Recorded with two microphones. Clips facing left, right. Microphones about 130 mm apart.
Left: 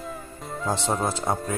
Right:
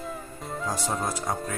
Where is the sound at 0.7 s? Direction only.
25° left (ahead or behind).